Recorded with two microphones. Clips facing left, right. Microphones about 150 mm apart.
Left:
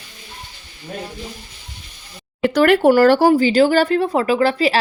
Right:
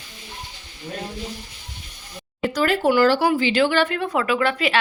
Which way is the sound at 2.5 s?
65° left (ahead or behind).